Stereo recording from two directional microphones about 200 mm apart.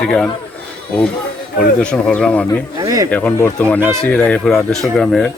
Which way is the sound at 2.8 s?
15° right (ahead or behind).